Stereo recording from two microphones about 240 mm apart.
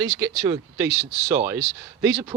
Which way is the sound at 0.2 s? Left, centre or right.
Centre.